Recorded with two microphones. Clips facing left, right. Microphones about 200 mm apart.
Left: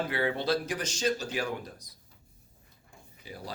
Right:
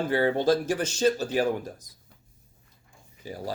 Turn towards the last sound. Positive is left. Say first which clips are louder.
# right 7 dB
turn(degrees=-40)  # may be behind; listen again after turning